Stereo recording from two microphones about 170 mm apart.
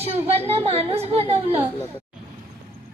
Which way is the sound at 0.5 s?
40° right (ahead or behind).